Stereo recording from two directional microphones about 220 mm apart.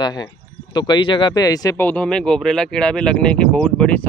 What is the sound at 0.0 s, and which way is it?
Speech, 20° left (ahead or behind).